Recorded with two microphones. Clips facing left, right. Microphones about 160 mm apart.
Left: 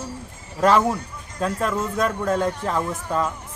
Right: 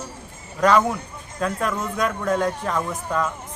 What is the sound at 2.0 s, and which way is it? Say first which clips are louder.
Speech: right 1 dB; centre (ahead or behind).